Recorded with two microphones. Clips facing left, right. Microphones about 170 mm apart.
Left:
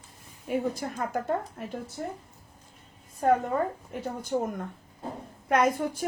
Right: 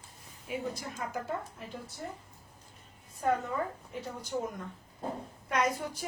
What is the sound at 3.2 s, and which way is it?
A woman's voice, 50° left (ahead or behind).